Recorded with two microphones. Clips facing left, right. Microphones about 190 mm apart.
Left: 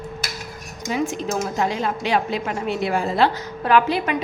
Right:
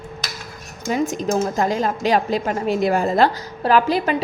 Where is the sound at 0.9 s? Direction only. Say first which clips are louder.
Right 3 dB; 40° right (ahead or behind).